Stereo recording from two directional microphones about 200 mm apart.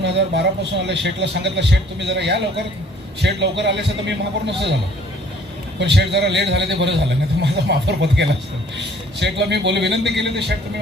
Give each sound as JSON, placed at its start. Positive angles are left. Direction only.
{"t": 0.0, "sound": "a man's voice", "side_deg": -60}
{"t": 5.8, "sound": "a man's voice", "side_deg": -60}